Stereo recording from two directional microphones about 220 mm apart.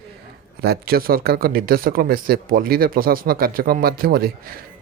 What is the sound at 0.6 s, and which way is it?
Speech, 45° right (ahead or behind).